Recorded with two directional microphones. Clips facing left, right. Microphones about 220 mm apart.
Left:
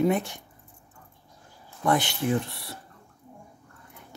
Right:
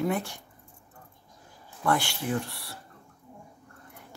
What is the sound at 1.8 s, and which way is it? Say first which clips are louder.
Speech: left 3 dB; 20° left (ahead or behind).